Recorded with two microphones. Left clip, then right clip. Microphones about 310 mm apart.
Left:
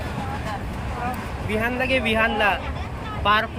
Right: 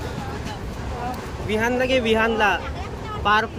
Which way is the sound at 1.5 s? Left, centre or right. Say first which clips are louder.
Right 2 dB; centre.